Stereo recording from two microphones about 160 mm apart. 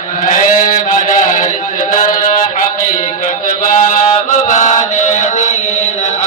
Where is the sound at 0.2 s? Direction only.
55° left (ahead or behind).